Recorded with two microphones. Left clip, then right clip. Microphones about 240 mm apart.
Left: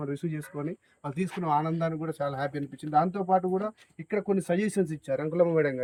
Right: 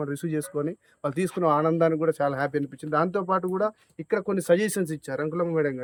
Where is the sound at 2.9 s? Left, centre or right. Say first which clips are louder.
Even; right.